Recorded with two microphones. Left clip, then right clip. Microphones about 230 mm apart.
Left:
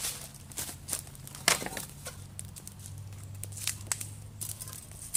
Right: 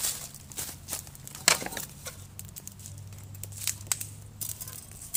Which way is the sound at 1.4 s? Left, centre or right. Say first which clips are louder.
Right 3 dB; centre.